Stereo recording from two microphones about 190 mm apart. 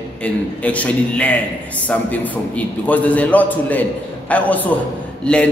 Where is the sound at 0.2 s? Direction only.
5° left (ahead or behind).